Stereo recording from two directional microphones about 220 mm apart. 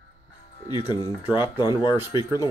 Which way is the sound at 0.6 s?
20° left (ahead or behind).